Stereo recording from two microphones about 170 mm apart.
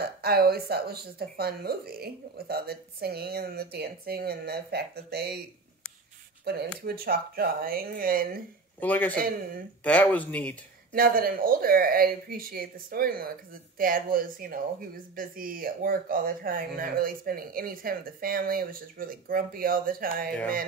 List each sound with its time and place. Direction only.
0.0 s speech: 65° right (ahead or behind)
7.1 s speech: 60° right (ahead or behind)
8.7 s a man's voice: 10° left (ahead or behind)
9.1 s speech: 60° right (ahead or behind)
9.8 s speech: 10° left (ahead or behind)
10.9 s speech: 60° right (ahead or behind)